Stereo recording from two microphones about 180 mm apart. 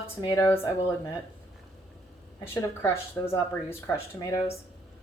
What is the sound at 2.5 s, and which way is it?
Speech, 15° left (ahead or behind).